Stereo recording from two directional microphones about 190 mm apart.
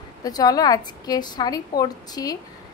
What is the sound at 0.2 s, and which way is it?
A woman's voice, 20° left (ahead or behind).